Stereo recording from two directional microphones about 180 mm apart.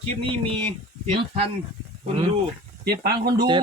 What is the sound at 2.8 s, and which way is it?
Speech, 60° right (ahead or behind).